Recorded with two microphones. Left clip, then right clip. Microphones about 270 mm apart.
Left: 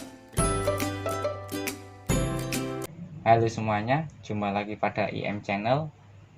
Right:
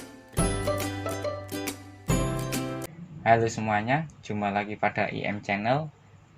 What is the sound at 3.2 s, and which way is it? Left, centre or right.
Speech, right.